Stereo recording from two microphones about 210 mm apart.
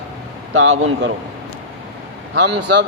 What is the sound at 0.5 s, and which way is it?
Speech, 75° right (ahead or behind).